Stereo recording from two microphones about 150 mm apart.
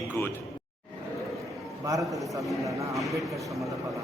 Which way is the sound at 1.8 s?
20° right (ahead or behind).